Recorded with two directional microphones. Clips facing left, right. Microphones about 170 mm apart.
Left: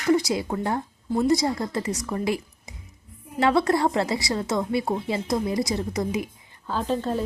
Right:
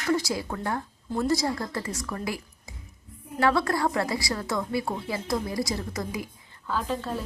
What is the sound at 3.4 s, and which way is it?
A woman's voice, 20° left (ahead or behind).